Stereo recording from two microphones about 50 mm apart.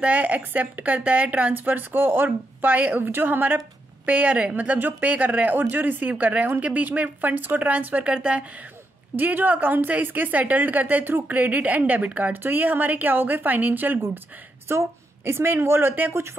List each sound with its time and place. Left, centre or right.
0.0 s speech: right
1.5 s a woman's voice: right
9.1 s a woman's voice: right
14.7 s a woman's voice: right